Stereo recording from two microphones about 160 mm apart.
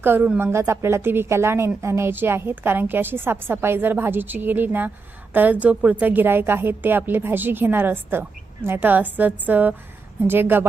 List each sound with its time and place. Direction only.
0.0 s a woman's voice: 10° right (ahead or behind)